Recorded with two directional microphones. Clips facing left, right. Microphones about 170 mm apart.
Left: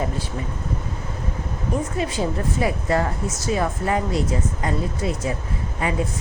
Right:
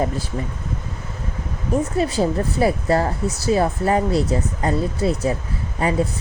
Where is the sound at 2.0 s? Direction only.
35° right (ahead or behind).